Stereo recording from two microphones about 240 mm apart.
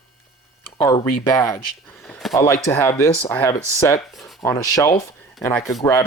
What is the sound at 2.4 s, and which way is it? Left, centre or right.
Speech, centre.